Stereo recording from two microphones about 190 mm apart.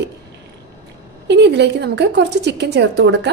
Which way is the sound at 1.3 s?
65° right (ahead or behind).